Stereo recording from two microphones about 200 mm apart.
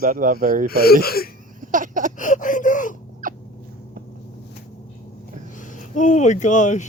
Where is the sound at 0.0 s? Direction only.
40° right (ahead or behind).